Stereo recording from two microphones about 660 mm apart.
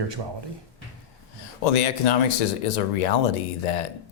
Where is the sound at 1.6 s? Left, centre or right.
Left.